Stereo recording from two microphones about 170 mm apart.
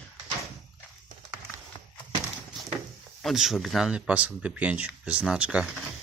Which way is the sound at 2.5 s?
Centre (ahead or behind).